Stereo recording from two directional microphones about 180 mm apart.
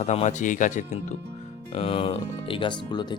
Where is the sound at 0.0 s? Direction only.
40° left (ahead or behind).